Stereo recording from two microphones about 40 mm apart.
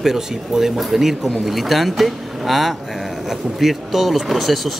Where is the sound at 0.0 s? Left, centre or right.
Centre.